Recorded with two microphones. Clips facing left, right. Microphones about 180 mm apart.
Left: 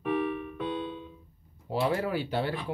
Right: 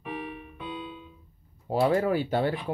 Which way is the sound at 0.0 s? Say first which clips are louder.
Left 8 dB; 55° left (ahead or behind).